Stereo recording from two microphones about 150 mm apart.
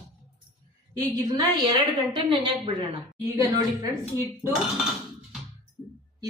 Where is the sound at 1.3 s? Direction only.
30° right (ahead or behind).